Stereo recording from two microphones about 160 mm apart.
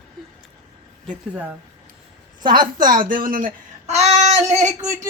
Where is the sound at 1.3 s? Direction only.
10° right (ahead or behind).